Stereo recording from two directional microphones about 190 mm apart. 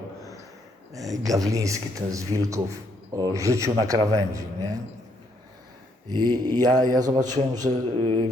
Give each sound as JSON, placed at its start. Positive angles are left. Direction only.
{"t": 0.9, "sound": "speech", "side_deg": -20}
{"t": 6.2, "sound": "a man's voice", "side_deg": -20}